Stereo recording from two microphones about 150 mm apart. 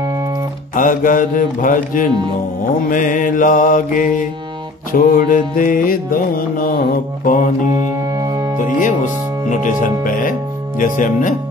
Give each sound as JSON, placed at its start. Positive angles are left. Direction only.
{"t": 0.7, "sound": "speech", "side_deg": 65}
{"t": 4.9, "sound": "music", "side_deg": 70}
{"t": 8.1, "sound": "music", "side_deg": -25}
{"t": 8.7, "sound": "speech", "side_deg": 60}